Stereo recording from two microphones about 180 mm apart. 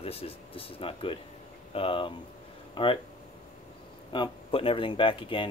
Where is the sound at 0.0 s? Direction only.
30° left (ahead or behind).